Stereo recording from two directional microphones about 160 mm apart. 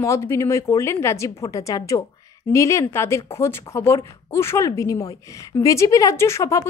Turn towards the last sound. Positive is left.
turn(degrees=20)  # may be behind; listen again after turning